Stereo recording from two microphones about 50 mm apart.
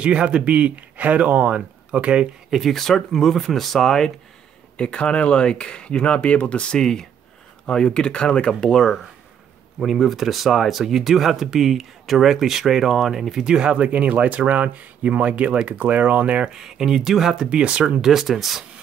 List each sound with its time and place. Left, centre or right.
0.0 s speech: right
2.5 s speech: centre
4.7 s speech: centre
9.8 s speech: centre; by 16.5 s right
16.5 s speech: centre
17.5 s speech: right
18.1 s speech: centre